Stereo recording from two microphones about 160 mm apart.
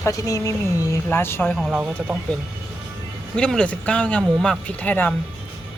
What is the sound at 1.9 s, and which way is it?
Speech, 10° right (ahead or behind).